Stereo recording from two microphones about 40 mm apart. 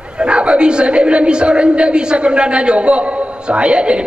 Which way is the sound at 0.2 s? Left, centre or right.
Right.